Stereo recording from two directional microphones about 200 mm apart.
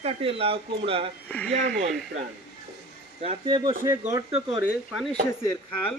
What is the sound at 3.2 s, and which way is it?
Speech, 25° right (ahead or behind).